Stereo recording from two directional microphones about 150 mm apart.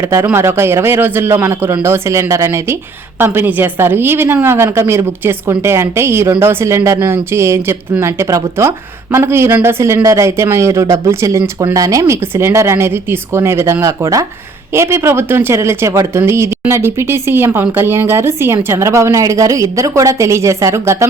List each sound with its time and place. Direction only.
0.0 s a woman's voice: 20° right (ahead or behind)